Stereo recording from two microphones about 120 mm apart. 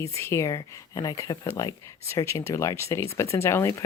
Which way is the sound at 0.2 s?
20° left (ahead or behind).